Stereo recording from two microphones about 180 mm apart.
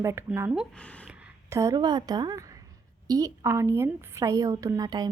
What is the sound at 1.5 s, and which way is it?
A woman's voice, 15° right (ahead or behind).